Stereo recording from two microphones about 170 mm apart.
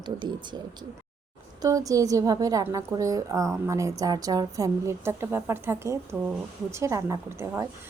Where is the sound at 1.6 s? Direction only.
20° right (ahead or behind).